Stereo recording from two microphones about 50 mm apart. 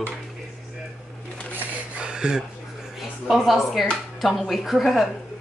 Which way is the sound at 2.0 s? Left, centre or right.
Centre.